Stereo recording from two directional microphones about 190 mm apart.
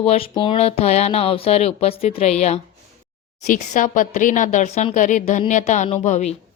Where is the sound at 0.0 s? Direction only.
30° left (ahead or behind).